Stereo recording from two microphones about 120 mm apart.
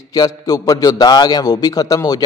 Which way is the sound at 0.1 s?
35° left (ahead or behind).